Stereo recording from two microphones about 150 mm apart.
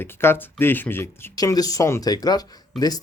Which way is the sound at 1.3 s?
25° left (ahead or behind).